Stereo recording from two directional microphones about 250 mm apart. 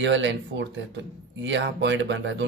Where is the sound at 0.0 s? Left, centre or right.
Right.